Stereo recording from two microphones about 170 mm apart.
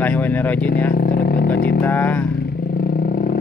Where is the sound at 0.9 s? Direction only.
65° left (ahead or behind).